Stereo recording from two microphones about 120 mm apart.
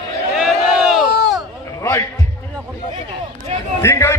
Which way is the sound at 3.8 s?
25° left (ahead or behind).